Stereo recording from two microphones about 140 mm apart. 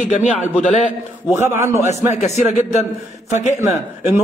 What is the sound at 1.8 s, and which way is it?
A man's voice, 55° left (ahead or behind).